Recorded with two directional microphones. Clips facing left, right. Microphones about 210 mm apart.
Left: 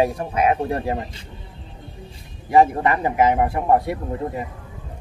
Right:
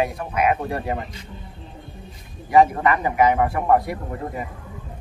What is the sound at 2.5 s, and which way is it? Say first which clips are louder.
A man's voice: even; 25° left (ahead or behind).